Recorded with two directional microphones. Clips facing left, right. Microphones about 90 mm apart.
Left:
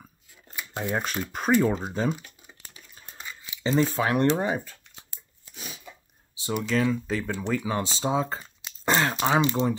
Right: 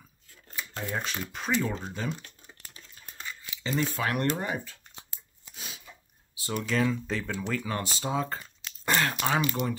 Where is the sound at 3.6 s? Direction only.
30° left (ahead or behind).